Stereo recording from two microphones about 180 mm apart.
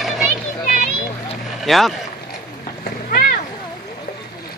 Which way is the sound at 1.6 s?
Centre (ahead or behind).